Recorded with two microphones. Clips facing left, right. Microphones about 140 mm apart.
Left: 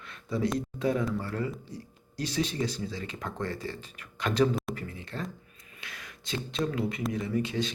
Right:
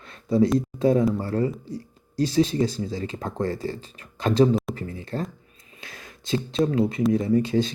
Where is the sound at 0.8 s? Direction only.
30° right (ahead or behind).